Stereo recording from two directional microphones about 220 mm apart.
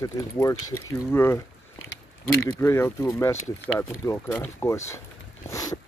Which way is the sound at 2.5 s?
10° left (ahead or behind).